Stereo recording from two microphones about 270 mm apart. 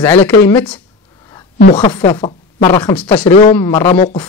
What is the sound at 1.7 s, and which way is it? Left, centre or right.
Speech, centre.